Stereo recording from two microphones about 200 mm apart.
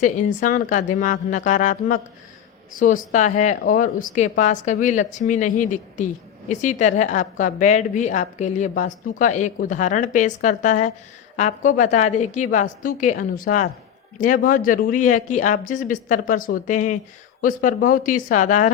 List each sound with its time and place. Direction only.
0.0 s a woman's voice: 40° left (ahead or behind)